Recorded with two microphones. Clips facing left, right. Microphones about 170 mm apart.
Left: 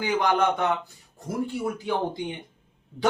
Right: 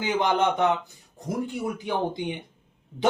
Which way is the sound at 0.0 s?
20° right (ahead or behind).